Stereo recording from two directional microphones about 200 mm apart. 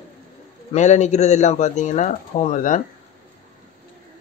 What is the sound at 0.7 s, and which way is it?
Speech, 35° left (ahead or behind).